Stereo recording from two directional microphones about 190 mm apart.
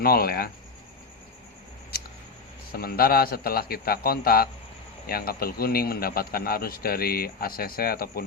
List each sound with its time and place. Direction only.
0.0 s a man's voice: 50° left (ahead or behind)
2.7 s a man's voice: 55° left (ahead or behind)